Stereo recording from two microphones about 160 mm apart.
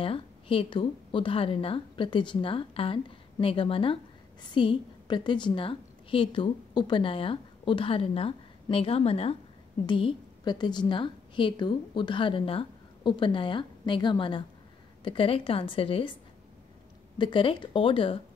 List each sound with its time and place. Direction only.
0.0 s a woman's voice: 35° left (ahead or behind)
17.2 s a woman's voice: 30° left (ahead or behind)